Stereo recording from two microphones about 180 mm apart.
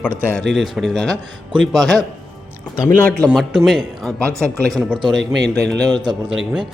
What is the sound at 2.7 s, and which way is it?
Speech, 15° left (ahead or behind).